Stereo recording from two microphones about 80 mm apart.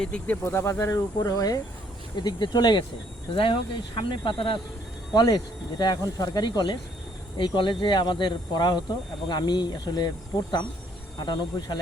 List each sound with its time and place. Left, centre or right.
0.0 s speech: centre
0.4 s speech: left
2.1 s speech: left
3.3 s speech: left
5.2 s speech: left
7.3 s speech: left
11.2 s speech: left